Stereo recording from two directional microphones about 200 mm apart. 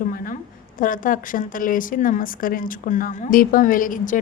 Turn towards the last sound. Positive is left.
turn(degrees=40)  # may be behind; listen again after turning